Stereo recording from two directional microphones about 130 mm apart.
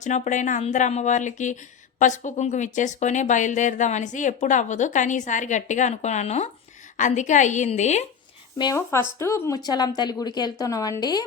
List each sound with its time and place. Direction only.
0.0 s speech: 70° left (ahead or behind)
6.9 s speech: 70° left (ahead or behind)
8.7 s speech: 20° left (ahead or behind)